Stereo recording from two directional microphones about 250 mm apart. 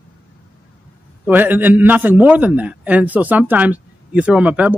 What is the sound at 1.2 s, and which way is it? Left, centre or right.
A man's voice, centre.